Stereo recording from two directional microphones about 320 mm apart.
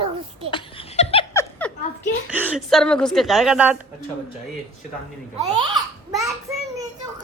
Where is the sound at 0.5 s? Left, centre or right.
Centre.